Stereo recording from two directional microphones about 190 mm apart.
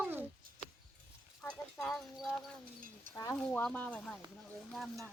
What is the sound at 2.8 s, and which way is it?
Speech, 45° right (ahead or behind).